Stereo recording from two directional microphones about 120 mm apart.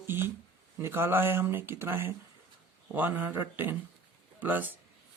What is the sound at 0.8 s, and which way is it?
Speech, 20° right (ahead or behind).